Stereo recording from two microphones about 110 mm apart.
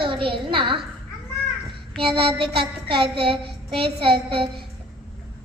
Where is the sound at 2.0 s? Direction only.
55° right (ahead or behind).